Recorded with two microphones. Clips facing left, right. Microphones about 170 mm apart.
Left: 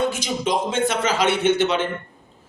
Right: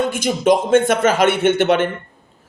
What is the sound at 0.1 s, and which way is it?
Speech, 50° right (ahead or behind).